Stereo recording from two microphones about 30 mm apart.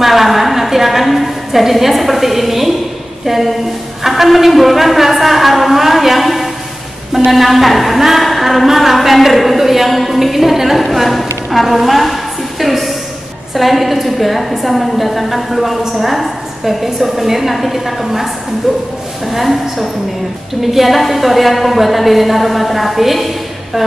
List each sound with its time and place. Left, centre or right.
0.0 s a sound: centre
3.3 s a woman's voice: centre
20.6 s a woman's voice: centre